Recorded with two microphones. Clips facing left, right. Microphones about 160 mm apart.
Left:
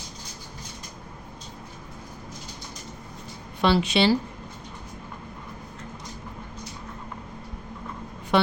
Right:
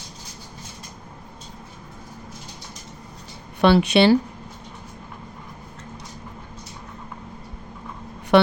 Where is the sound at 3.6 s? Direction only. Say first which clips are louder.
Right 5 dB; 60° right (ahead or behind).